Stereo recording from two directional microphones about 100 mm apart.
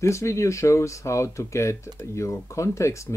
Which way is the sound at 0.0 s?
30° left (ahead or behind).